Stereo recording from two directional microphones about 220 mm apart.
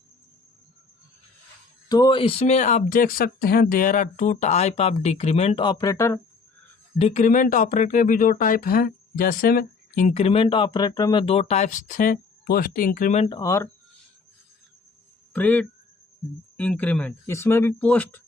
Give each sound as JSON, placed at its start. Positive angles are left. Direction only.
{"t": 1.9, "sound": "speech", "side_deg": 20}
{"t": 7.0, "sound": "speech", "side_deg": 35}
{"t": 13.2, "sound": "speech", "side_deg": 20}
{"t": 15.3, "sound": "speech", "side_deg": 5}